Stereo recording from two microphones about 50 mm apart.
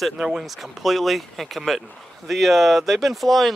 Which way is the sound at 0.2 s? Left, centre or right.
Centre.